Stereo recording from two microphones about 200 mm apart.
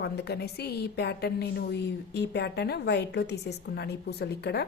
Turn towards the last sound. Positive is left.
turn(degrees=55)  # may be behind; listen again after turning